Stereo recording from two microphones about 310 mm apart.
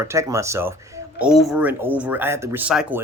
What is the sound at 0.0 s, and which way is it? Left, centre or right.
Speech, centre.